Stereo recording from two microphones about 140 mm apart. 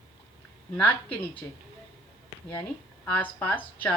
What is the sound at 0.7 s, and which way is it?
Speech, 10° left (ahead or behind).